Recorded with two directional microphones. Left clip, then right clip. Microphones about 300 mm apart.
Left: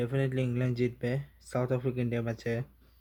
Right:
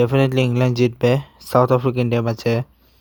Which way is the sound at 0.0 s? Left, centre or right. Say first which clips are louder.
Right 15 dB; right.